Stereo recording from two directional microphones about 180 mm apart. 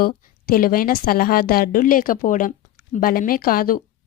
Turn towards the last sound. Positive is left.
turn(degrees=55)  # may be behind; listen again after turning